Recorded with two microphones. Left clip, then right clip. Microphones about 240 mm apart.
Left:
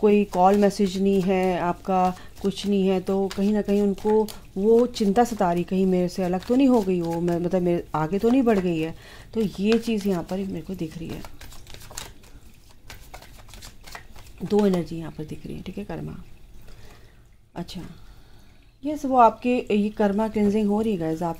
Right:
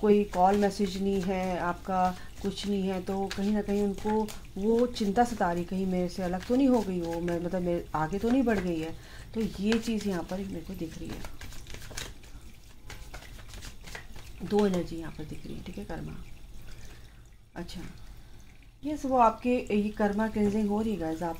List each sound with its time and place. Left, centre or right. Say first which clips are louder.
0.0 s speech: left 5 dB; left
11.1 s a sound: left 4 dB; centre
14.5 s speech: left 5 dB; left
18.9 s speech: left 6 dB; left